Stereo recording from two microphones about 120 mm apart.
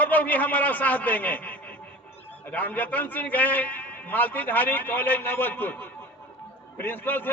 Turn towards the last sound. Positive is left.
turn(degrees=15)  # may be behind; listen again after turning